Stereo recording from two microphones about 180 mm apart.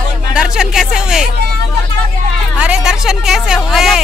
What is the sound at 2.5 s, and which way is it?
Speech, 5° right (ahead or behind).